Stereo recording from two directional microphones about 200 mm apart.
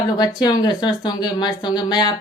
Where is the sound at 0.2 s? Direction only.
20° left (ahead or behind).